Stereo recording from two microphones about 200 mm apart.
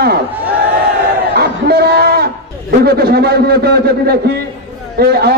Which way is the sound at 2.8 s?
50° right (ahead or behind).